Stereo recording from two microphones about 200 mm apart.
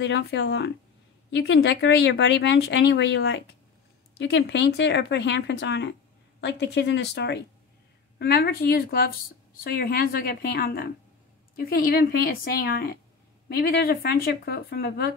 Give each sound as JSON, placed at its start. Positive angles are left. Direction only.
{"t": 0.0, "sound": "speech", "side_deg": 60}